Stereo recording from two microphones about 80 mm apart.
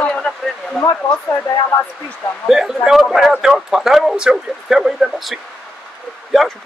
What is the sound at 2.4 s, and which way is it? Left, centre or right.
Speech, centre.